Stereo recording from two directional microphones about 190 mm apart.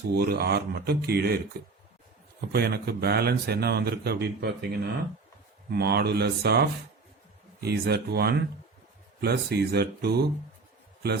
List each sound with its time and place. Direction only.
0.1 s speech: 55° right (ahead or behind)
2.5 s speech: 55° right (ahead or behind)